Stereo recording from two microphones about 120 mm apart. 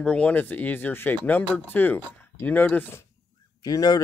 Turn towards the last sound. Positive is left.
turn(degrees=30)  # may be behind; listen again after turning